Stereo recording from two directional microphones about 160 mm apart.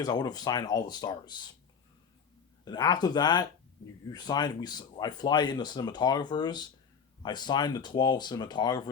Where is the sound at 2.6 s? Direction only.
25° left (ahead or behind).